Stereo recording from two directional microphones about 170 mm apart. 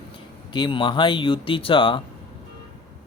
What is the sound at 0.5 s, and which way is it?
Speech, 30° left (ahead or behind).